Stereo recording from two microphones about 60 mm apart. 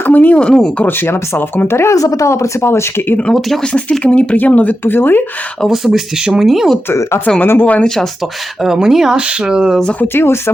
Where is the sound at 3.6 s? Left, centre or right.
Centre.